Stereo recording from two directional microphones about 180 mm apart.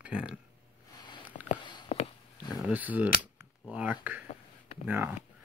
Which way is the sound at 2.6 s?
10° right (ahead or behind).